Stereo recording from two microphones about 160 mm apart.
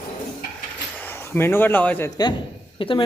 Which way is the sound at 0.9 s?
15° left (ahead or behind).